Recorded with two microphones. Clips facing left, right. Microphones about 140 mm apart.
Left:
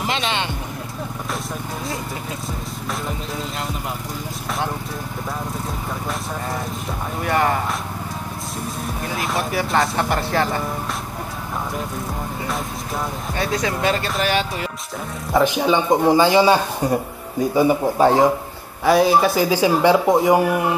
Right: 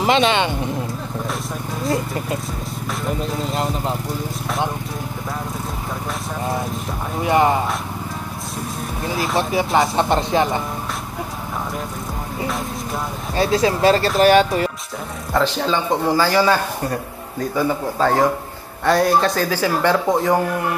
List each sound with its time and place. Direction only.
7.2 s speech: 20° right (ahead or behind)
9.4 s speech: 20° right (ahead or behind)
13.4 s speech: 30° right (ahead or behind)
15.3 s speech: 15° left (ahead or behind)
18.9 s speech: 5° left (ahead or behind)